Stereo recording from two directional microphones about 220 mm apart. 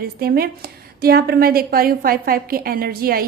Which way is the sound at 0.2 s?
45° right (ahead or behind).